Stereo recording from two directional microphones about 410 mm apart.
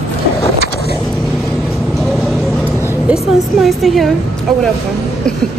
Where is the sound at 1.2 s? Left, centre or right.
Centre.